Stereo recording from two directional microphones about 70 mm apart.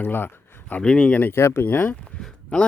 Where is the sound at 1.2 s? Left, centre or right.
Left.